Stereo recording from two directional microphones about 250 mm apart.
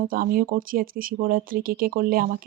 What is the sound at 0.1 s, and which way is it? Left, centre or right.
Speech, right.